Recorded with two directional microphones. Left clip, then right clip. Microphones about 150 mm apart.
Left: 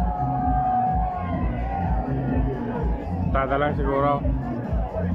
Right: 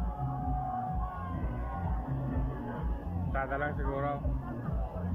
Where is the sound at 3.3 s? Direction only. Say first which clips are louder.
Left 11 dB; 20° left (ahead or behind).